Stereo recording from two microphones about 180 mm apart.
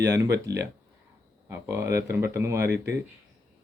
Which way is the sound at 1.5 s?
15° right (ahead or behind).